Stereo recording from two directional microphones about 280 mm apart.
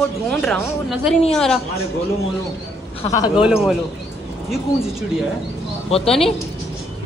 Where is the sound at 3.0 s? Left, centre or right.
Centre.